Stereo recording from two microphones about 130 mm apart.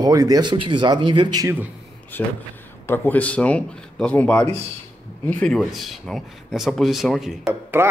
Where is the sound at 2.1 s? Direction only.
15° left (ahead or behind).